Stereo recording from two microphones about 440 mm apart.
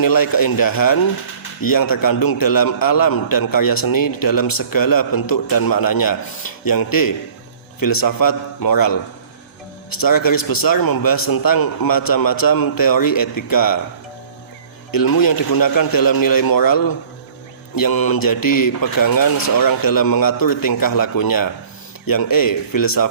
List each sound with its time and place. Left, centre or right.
0.0 s a man's voice: left
14.9 s a man's voice: left